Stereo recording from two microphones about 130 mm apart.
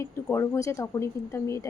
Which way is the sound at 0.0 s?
20° left (ahead or behind).